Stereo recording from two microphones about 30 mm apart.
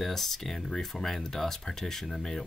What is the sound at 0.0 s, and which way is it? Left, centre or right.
Speech, centre.